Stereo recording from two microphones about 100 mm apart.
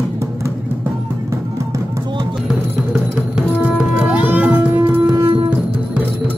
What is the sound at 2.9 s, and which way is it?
Music, 10° right (ahead or behind).